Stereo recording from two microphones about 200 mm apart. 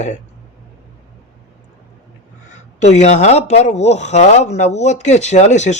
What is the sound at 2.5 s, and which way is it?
Speech, 35° left (ahead or behind).